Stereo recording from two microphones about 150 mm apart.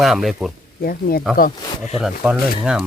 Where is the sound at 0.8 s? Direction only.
90° left.